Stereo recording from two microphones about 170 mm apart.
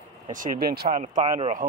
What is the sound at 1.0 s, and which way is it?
Speech, 45° right (ahead or behind).